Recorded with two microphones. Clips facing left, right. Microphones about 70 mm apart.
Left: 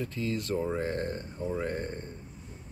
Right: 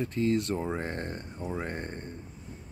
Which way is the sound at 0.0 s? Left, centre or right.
Right.